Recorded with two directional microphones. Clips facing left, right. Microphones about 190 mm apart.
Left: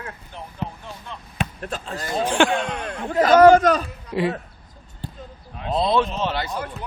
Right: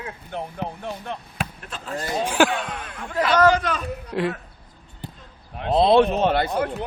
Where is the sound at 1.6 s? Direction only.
40° left (ahead or behind).